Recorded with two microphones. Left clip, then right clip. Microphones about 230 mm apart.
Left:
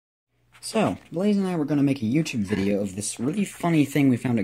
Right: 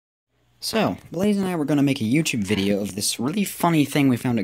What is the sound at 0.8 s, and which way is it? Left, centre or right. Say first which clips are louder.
Speech: right 2 dB; right.